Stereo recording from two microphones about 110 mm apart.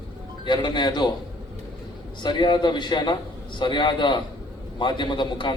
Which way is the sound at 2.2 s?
45° left (ahead or behind).